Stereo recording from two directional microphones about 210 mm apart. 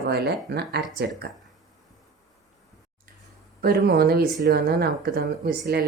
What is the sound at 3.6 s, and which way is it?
Speech, 45° right (ahead or behind).